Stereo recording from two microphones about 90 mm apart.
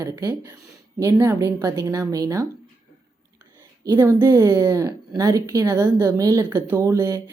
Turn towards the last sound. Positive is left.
turn(degrees=-30)  # may be behind; listen again after turning